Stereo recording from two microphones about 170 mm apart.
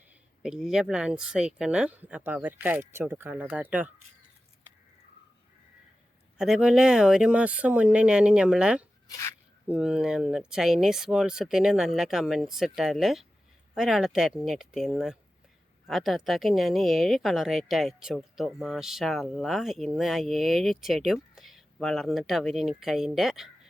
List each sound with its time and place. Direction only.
0.4 s speech: 5° right (ahead or behind)
6.3 s speech: 5° right (ahead or behind)
9.0 s speech: 20° left (ahead or behind)
9.6 s speech: 5° right (ahead or behind)